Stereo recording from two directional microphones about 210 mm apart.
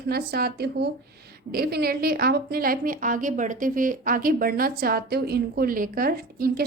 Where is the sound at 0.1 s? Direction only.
50° right (ahead or behind).